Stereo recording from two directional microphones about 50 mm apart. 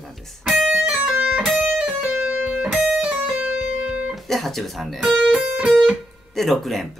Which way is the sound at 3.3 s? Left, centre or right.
Right.